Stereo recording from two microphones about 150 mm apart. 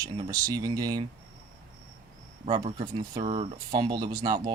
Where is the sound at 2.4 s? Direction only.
40° right (ahead or behind).